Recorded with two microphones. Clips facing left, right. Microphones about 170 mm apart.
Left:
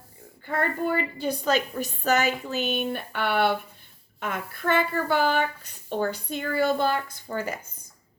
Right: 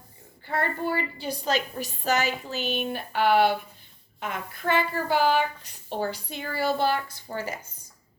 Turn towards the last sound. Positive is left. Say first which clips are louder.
# left 2 dB
turn(degrees=55)  # may be behind; listen again after turning